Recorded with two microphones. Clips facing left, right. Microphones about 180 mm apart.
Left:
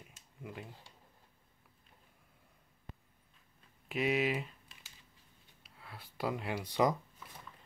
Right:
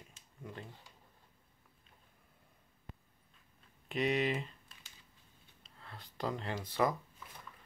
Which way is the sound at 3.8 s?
5° left (ahead or behind).